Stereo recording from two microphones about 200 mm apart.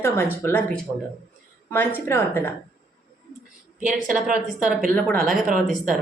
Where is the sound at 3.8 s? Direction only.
40° right (ahead or behind).